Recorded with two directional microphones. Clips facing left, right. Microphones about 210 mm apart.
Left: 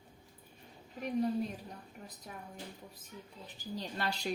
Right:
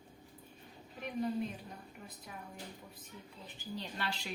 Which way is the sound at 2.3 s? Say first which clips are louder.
Left 2 dB; 40° left (ahead or behind).